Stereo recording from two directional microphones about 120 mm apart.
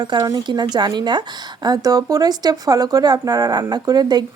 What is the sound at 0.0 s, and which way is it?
Speech, 35° right (ahead or behind).